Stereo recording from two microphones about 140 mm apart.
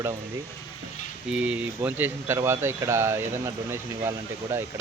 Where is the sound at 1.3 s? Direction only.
10° right (ahead or behind).